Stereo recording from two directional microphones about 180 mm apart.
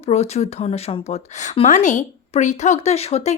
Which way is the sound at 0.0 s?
35° left (ahead or behind).